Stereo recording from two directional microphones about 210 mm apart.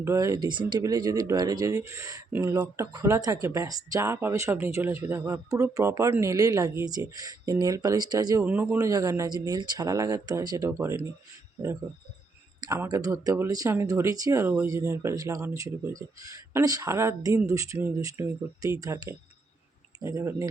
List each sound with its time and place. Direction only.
0.0 s speech: 15° right (ahead or behind)
8.4 s speech: 10° right (ahead or behind)
12.5 s speech: 15° right (ahead or behind)